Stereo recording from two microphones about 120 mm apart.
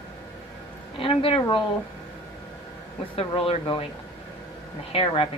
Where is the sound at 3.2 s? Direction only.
50° left (ahead or behind).